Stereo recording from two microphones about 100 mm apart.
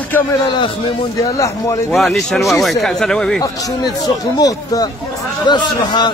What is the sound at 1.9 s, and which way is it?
Speech, centre (ahead or behind).